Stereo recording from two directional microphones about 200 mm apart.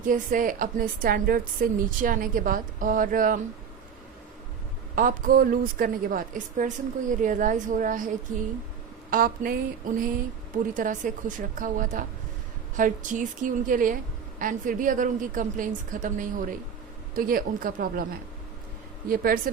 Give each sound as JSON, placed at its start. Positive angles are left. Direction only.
{"t": 0.0, "sound": "a woman's voice", "side_deg": -40}
{"t": 4.9, "sound": "a woman's voice", "side_deg": -45}
{"t": 19.0, "sound": "a woman's voice", "side_deg": -45}